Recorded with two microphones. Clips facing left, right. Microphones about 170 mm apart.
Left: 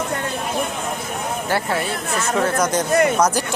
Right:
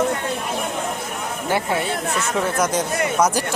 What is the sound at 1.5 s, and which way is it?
Speech, 20° right (ahead or behind).